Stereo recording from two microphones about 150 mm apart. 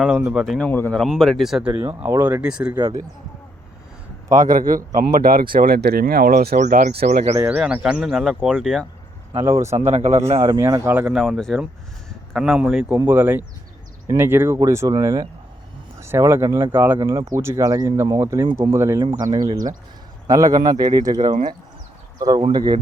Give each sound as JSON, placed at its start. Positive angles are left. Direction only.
{"t": 0.0, "sound": "speech", "side_deg": -5}
{"t": 0.7, "sound": "speech", "side_deg": 10}
{"t": 4.4, "sound": "speech", "side_deg": -65}
{"t": 6.6, "sound": "speech", "side_deg": -60}
{"t": 7.3, "sound": "speech", "side_deg": -10}
{"t": 9.4, "sound": "speech", "side_deg": -20}
{"t": 9.7, "sound": "speech", "side_deg": -50}
{"t": 10.3, "sound": "speech", "side_deg": -20}
{"t": 10.9, "sound": "speech", "side_deg": -5}
{"t": 22.2, "sound": "speech", "side_deg": -25}